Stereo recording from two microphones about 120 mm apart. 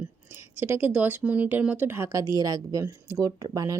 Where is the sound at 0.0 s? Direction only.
20° right (ahead or behind).